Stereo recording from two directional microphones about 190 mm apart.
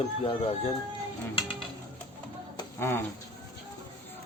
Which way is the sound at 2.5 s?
10° left (ahead or behind).